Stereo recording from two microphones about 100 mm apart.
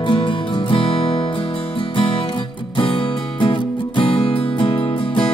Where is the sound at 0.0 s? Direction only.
60° left (ahead or behind).